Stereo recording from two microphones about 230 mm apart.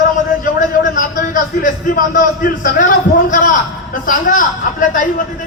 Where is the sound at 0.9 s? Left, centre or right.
Left.